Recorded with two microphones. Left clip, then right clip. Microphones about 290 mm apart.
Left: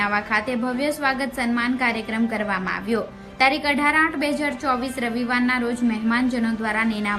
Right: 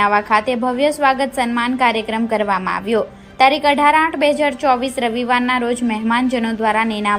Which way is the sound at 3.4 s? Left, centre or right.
Centre.